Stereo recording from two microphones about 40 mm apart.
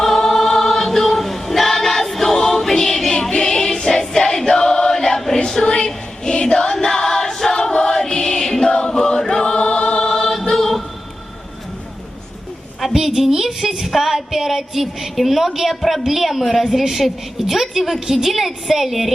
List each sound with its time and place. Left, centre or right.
0.0 s choir: centre
2.3 s music: centre
3.1 s choir: centre
5.6 s music: left
6.7 s choir: centre
7.7 s music: centre
8.7 s choir: centre
10.1 s choir: centre
12.9 s a sound: centre
15.8 s a woman's voice: centre